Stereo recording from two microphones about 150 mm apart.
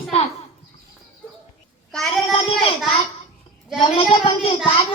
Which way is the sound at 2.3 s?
40° left (ahead or behind).